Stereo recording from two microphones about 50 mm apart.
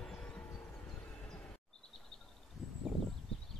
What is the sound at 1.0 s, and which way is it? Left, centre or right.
Vehicle, left.